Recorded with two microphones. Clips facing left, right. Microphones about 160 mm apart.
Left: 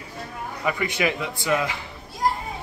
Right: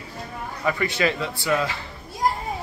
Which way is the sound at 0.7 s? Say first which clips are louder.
Right 1 dB; 15° left (ahead or behind).